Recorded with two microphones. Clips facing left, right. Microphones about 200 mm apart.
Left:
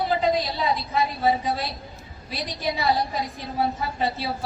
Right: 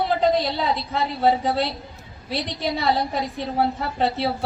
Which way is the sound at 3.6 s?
65° right (ahead or behind).